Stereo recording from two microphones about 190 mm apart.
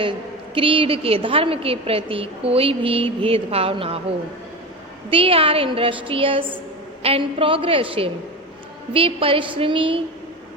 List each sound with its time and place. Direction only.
0.5 s a woman's voice: 25° right (ahead or behind)
5.1 s a woman's voice: 30° right (ahead or behind)